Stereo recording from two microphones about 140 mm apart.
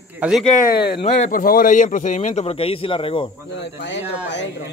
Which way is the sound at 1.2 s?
90° left.